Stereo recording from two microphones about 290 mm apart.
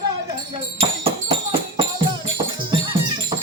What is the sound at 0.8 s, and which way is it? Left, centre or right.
Music, centre.